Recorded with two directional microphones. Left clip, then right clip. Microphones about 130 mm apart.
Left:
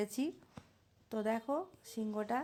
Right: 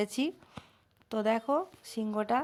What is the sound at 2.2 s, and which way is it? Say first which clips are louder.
Speech: right 8 dB; 45° right (ahead or behind).